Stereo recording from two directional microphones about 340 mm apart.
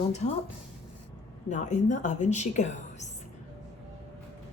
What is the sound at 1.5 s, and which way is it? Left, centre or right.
Speech, left.